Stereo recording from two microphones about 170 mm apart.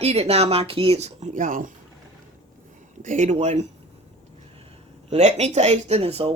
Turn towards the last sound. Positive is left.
turn(degrees=-35)  # may be behind; listen again after turning